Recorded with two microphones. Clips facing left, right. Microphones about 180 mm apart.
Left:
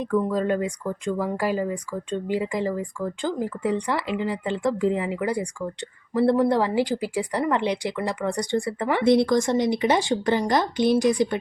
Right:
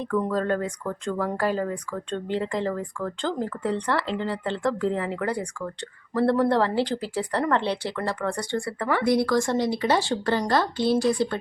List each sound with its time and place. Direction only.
0.2 s speech: 10° left (ahead or behind)